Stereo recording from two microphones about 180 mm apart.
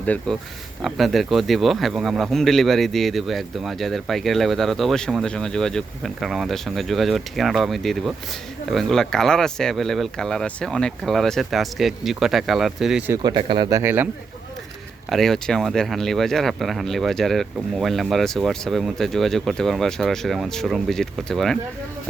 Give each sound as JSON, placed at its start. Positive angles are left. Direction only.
{"t": 0.0, "sound": "speech", "side_deg": 10}
{"t": 13.1, "sound": "speech", "side_deg": -25}
{"t": 15.1, "sound": "speech", "side_deg": 0}